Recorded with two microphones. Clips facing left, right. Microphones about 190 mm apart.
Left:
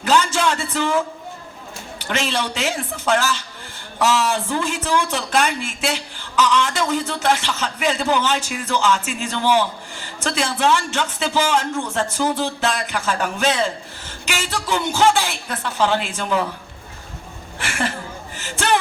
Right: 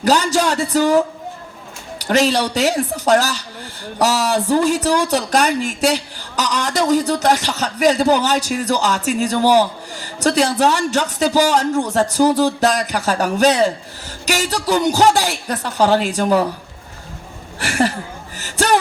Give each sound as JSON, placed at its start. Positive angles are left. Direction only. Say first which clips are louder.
{"t": 0.0, "sound": "speech", "louder": "right 3 dB", "side_deg": -40}
{"t": 17.6, "sound": "speech", "louder": "right 7 dB", "side_deg": -40}
{"t": 18.3, "sound": "a sound", "louder": "right 4 dB", "side_deg": -40}